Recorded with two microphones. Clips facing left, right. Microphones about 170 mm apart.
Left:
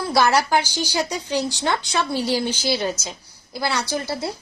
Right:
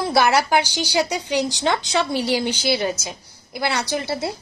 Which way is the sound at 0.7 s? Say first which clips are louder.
Right 3 dB; 75° right (ahead or behind).